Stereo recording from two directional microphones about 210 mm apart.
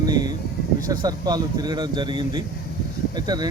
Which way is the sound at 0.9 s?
20° right (ahead or behind).